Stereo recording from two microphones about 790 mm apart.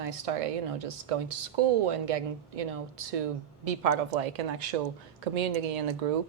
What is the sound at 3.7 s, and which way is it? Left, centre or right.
Speech, right.